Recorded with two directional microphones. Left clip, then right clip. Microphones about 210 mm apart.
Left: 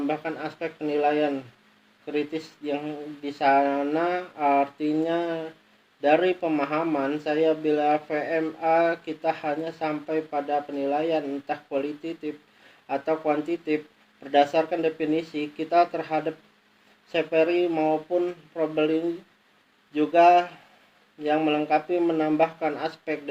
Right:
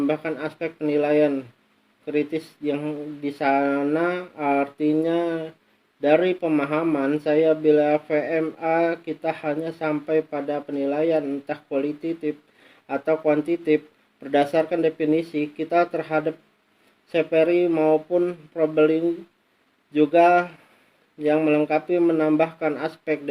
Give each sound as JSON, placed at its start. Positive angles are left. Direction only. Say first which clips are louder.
{"t": 0.1, "sound": "speech", "louder": "right 3 dB", "side_deg": -50}